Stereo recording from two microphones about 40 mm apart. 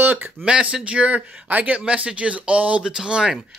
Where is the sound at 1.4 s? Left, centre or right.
Right.